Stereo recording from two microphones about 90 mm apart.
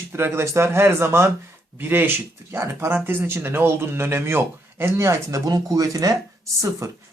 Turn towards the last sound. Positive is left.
turn(degrees=-35)  # may be behind; listen again after turning